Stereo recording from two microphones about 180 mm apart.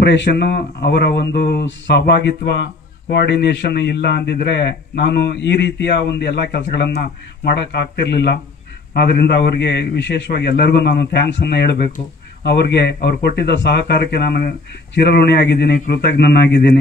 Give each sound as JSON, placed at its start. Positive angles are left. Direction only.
{"t": 0.0, "sound": "speech", "side_deg": 75}